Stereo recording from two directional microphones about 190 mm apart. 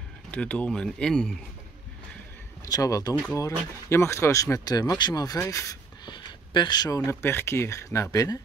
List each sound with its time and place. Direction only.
0.3 s speech: 5° left (ahead or behind)
2.6 s speech: 20° left (ahead or behind)